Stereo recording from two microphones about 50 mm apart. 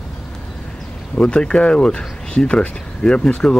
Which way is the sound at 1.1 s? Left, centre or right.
Centre.